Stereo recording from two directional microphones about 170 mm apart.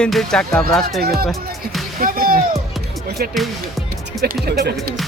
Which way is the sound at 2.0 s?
55° right (ahead or behind).